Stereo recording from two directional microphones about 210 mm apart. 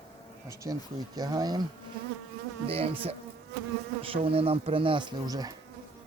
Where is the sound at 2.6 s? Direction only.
25° right (ahead or behind).